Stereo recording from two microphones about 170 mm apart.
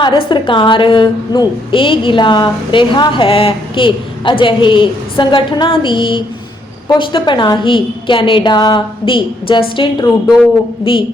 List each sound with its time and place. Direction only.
0.0 s a woman's voice: 25° left (ahead or behind)